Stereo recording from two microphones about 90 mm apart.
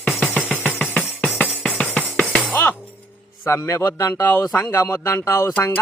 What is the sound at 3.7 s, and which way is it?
Speech, 30° left (ahead or behind).